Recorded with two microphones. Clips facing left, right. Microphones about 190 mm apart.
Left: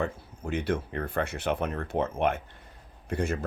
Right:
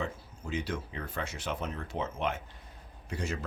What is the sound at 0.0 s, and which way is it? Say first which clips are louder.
Speech: left 5 dB; 55° left (ahead or behind).